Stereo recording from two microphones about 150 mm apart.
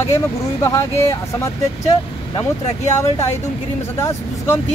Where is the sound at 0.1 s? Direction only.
20° left (ahead or behind).